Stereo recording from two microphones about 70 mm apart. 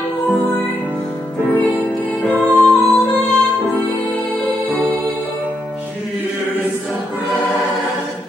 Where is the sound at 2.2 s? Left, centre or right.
Left.